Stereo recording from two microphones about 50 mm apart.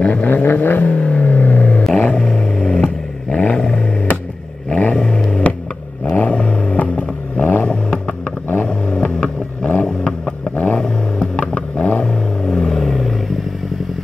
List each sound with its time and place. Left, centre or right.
0.1 s vehicle: left
8.6 s vehicle: centre
12.0 s vehicle: centre